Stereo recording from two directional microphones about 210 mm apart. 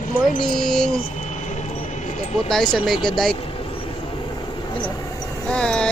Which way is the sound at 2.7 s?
Centre (ahead or behind).